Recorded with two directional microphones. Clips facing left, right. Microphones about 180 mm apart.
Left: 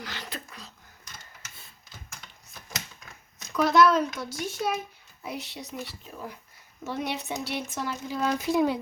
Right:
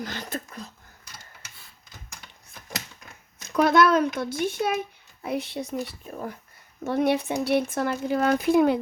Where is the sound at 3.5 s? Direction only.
55° right (ahead or behind).